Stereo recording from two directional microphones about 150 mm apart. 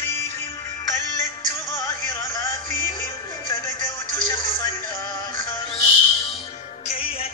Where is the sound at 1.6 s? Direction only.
20° left (ahead or behind).